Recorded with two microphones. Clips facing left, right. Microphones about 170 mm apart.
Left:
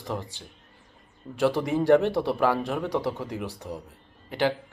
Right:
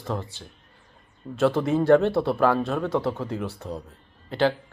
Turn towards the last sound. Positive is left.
turn(degrees=15)  # may be behind; listen again after turning